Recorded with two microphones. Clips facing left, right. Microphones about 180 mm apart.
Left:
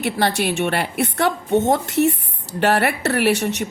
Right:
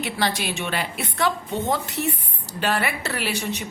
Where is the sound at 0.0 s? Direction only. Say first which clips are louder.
Left 5 dB; 65° left (ahead or behind).